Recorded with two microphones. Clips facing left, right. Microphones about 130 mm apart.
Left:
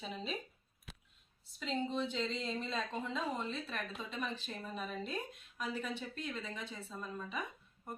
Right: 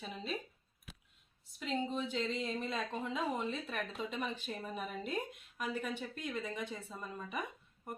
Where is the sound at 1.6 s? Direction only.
10° right (ahead or behind).